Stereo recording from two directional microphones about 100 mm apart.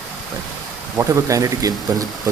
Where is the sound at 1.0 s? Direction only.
35° right (ahead or behind).